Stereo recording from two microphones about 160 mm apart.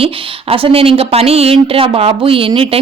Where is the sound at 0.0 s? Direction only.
35° right (ahead or behind).